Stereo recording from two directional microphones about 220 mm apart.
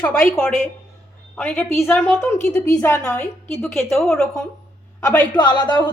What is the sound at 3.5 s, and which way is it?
Speech, centre (ahead or behind).